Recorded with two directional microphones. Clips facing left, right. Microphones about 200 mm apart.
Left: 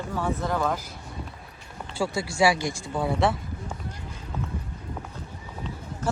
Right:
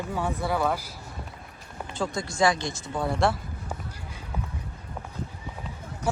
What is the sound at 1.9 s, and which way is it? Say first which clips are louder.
Speech: left 2 dB; 10° left (ahead or behind).